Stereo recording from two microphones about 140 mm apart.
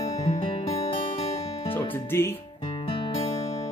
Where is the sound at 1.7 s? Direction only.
15° left (ahead or behind).